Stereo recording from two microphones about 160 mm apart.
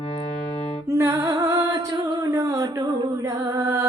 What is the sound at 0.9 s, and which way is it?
Music, 20° right (ahead or behind).